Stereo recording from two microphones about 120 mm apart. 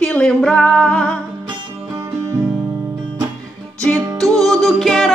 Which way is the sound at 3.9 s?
30° right (ahead or behind).